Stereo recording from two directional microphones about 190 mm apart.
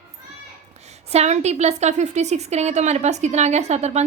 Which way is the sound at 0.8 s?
35° right (ahead or behind).